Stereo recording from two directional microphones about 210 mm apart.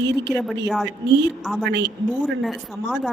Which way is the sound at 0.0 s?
55° right (ahead or behind).